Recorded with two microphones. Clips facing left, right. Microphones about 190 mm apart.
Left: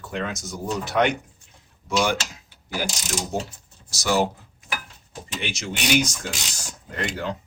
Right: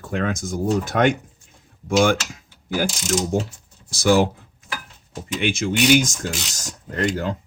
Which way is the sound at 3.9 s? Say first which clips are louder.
Right 5 dB; 55° right (ahead or behind).